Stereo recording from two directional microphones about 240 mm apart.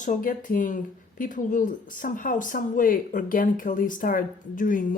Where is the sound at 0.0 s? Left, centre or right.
Left.